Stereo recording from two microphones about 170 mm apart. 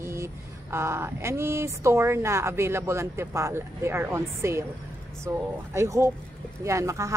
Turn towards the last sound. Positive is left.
turn(degrees=-15)  # may be behind; listen again after turning